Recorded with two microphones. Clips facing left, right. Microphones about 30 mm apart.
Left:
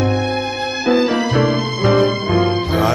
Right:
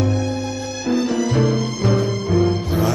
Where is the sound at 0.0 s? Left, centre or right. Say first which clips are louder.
Left 4 dB; left.